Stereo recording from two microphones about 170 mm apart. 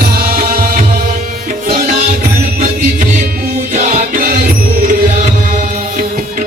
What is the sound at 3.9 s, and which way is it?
Music, 60° right (ahead or behind).